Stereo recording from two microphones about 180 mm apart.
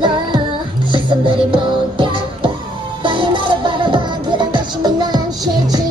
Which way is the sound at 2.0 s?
25° right (ahead or behind).